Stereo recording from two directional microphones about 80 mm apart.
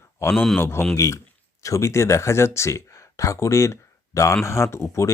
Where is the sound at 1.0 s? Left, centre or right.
Left.